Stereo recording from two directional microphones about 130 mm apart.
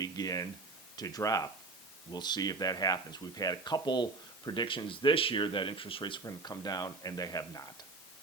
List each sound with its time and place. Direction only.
0.0 s speech: 30° left (ahead or behind)
6.2 s speech: 30° left (ahead or behind)